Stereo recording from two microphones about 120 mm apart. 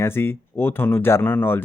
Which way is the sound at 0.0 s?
20° left (ahead or behind).